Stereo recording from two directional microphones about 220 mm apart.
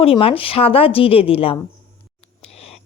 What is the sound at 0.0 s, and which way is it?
A woman's voice, 25° left (ahead or behind).